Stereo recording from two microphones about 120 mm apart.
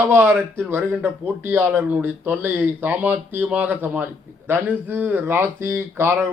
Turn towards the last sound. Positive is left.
turn(degrees=-20)  # may be behind; listen again after turning